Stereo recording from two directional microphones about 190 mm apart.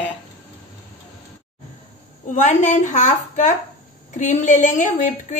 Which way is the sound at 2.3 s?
40° left (ahead or behind).